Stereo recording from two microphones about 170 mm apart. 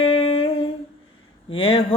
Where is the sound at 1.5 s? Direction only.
35° left (ahead or behind).